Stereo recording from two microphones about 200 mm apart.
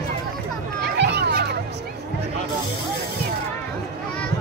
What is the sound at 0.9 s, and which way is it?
Children playing, 55° right (ahead or behind).